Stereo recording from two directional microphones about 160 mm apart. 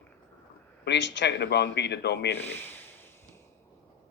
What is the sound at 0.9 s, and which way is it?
Speech, 90° left.